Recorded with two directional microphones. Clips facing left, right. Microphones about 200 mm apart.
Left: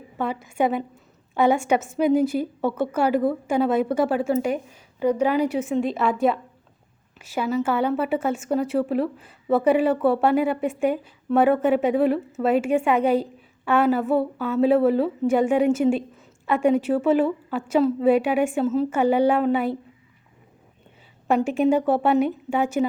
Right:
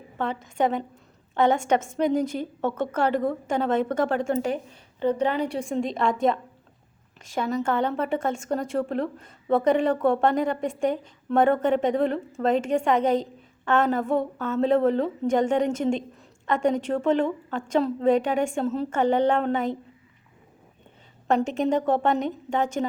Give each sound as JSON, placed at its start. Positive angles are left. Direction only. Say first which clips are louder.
{"t": 0.2, "sound": "a woman's voice", "louder": "left 2 dB", "side_deg": 10}
{"t": 21.2, "sound": "a woman's voice", "louder": "left 3 dB", "side_deg": 10}